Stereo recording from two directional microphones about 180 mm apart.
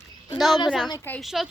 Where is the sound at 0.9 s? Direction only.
20° left (ahead or behind).